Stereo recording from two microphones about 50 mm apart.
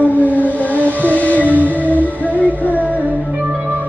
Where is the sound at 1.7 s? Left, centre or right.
Left.